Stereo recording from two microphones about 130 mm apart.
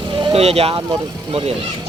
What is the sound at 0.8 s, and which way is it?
Speech, 35° right (ahead or behind).